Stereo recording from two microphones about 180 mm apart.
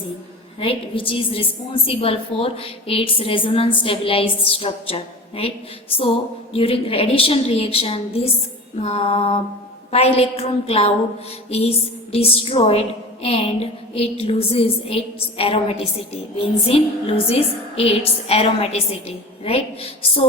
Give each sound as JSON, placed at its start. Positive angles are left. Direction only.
{"t": 0.6, "sound": "a woman's voice", "side_deg": 30}
{"t": 11.4, "sound": "music", "side_deg": 35}
{"t": 12.1, "sound": "a woman's voice", "side_deg": 30}